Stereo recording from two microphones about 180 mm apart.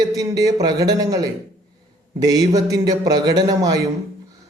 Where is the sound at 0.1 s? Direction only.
20° right (ahead or behind).